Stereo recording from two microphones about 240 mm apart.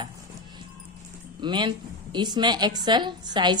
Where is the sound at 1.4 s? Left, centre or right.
Centre.